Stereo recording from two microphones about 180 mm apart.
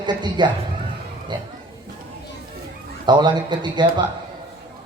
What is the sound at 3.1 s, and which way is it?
Speech, 25° right (ahead or behind).